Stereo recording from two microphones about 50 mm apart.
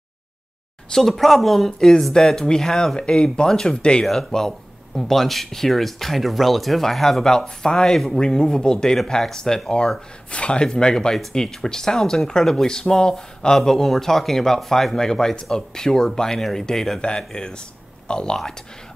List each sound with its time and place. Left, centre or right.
0.9 s speech: centre
4.0 s speech: centre